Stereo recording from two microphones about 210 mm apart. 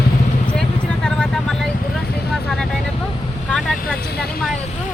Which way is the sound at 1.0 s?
5° left (ahead or behind).